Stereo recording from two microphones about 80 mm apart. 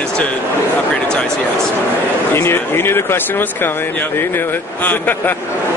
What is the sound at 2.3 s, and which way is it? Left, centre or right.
Speech, left.